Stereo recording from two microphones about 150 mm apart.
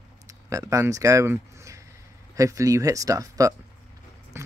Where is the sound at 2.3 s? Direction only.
20° right (ahead or behind).